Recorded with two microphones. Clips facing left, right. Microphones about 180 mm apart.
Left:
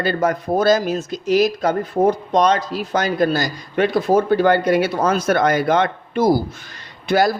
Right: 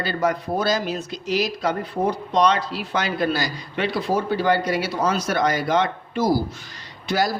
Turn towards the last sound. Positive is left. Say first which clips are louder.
# left 6 dB
turn(degrees=55)  # may be behind; listen again after turning